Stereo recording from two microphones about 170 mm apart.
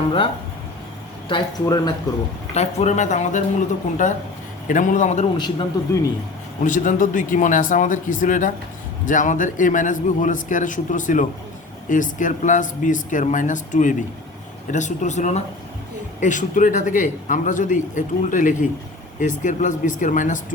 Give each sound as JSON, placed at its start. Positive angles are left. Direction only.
{"t": 1.3, "sound": "speech", "side_deg": 25}
{"t": 2.6, "sound": "a man's voice", "side_deg": 40}
{"t": 5.8, "sound": "speech", "side_deg": 20}
{"t": 6.6, "sound": "a man's voice", "side_deg": 50}